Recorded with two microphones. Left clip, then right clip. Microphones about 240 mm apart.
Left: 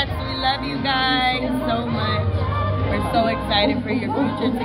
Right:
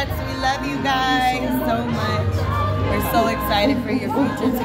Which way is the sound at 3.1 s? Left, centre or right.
Centre.